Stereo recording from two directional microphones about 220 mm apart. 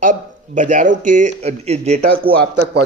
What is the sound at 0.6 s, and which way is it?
Speech, 35° right (ahead or behind).